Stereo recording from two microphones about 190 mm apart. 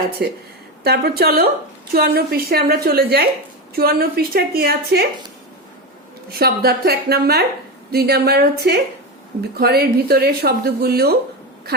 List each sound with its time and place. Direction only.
0.2 s a woman's voice: 60° right (ahead or behind)
6.4 s speech: 55° right (ahead or behind)